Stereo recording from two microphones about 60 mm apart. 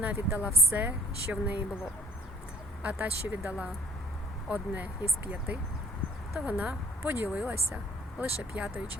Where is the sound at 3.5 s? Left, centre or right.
Right.